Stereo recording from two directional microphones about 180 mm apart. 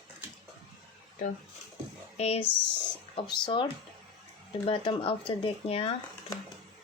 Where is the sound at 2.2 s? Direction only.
35° left (ahead or behind).